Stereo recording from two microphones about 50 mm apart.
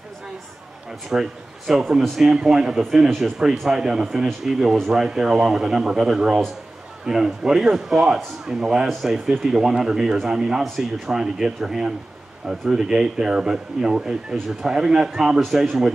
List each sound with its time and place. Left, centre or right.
1.1 s a man's voice: centre